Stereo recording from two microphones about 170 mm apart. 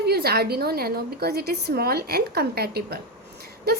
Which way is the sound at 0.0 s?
70° right (ahead or behind).